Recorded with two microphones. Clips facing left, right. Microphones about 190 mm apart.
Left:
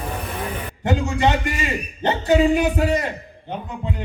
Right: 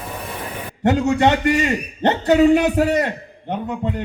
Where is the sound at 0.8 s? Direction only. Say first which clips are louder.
Right 5 dB; 65° right (ahead or behind).